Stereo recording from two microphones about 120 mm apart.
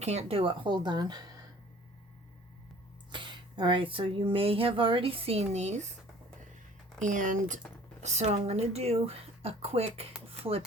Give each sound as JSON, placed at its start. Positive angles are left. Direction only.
{"t": 0.0, "sound": "speech", "side_deg": -65}
{"t": 3.1, "sound": "a sound", "side_deg": -40}
{"t": 3.9, "sound": "speech", "side_deg": -50}
{"t": 7.0, "sound": "speech", "side_deg": -90}
{"t": 8.0, "sound": "speech", "side_deg": -70}
{"t": 10.2, "sound": "music", "side_deg": -55}